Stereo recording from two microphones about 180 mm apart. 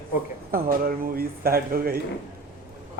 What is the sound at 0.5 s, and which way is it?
Speech, 55° right (ahead or behind).